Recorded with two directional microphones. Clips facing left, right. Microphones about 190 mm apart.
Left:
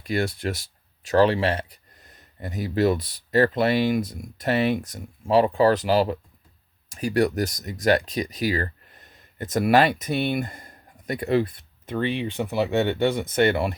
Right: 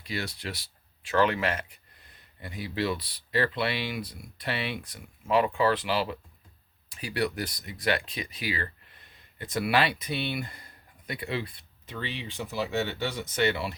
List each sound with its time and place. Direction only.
0.0 s speech: 50° left (ahead or behind)